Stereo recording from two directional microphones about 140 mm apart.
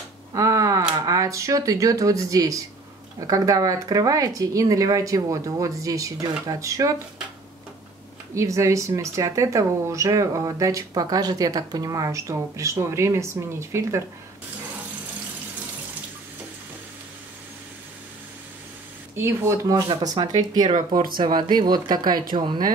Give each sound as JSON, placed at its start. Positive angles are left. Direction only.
{"t": 0.3, "sound": "a sound", "side_deg": -25}
{"t": 1.0, "sound": "speech", "side_deg": -25}
{"t": 8.4, "sound": "speech", "side_deg": -20}
{"t": 19.1, "sound": "speech", "side_deg": -20}
{"t": 19.9, "sound": "speech", "side_deg": -30}
{"t": 20.7, "sound": "speech", "side_deg": -80}
{"t": 21.2, "sound": "speech", "side_deg": -30}